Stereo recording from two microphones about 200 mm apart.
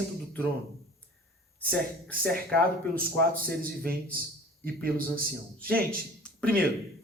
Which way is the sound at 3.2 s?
45° right (ahead or behind).